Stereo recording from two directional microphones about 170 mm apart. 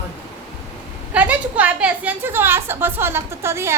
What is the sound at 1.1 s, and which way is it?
A woman's voice, 10° right (ahead or behind).